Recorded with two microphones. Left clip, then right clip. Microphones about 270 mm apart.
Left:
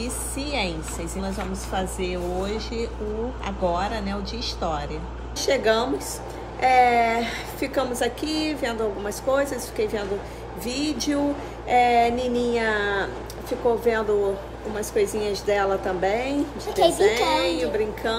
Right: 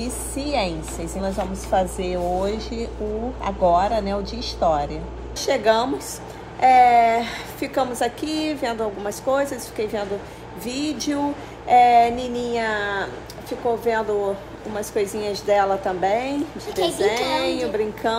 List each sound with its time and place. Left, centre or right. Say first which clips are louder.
0.0 s a woman's voice: right 2 dB; centre
16.6 s a woman's voice: left 4 dB; left
17.0 s a woman's voice: left 1 dB; centre